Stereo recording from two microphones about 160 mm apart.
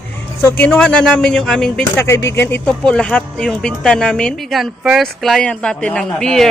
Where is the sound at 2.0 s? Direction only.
15° left (ahead or behind).